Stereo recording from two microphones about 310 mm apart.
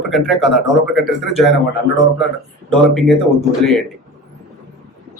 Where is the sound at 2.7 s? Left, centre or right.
Centre.